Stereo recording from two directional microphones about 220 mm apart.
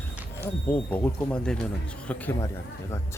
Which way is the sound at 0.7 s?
5° left (ahead or behind).